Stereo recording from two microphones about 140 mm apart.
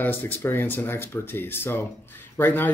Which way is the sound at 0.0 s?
15° left (ahead or behind).